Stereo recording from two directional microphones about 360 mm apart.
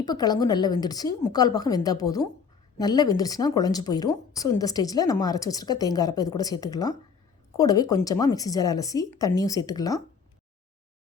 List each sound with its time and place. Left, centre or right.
0.0 s speech: centre